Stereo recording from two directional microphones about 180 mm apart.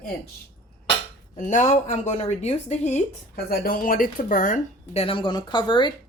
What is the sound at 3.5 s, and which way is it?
Speech, 55° left (ahead or behind).